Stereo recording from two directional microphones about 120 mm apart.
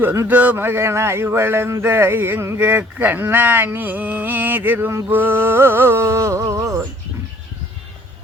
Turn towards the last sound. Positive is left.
turn(degrees=-25)  # may be behind; listen again after turning